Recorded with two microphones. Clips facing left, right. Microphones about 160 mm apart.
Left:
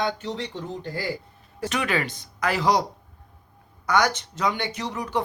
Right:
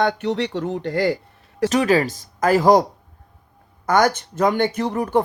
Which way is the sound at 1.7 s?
40° right (ahead or behind).